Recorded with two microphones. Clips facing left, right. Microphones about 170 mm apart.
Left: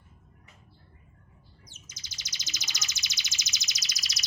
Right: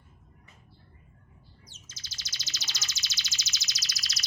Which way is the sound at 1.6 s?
15° left (ahead or behind).